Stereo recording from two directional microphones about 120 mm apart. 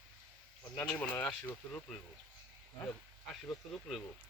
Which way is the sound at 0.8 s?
10° left (ahead or behind).